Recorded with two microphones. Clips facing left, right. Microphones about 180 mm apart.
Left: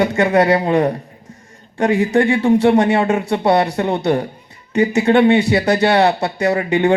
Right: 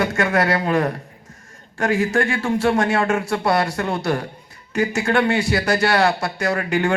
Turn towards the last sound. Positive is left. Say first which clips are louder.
# left 5 dB
turn(degrees=20)  # may be behind; listen again after turning